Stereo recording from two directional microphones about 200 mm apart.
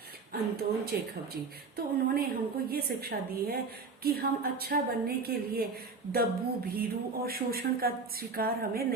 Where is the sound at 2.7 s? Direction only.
50° right (ahead or behind).